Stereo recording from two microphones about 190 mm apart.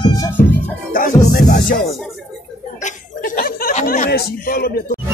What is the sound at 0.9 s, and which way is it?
Music, 45° left (ahead or behind).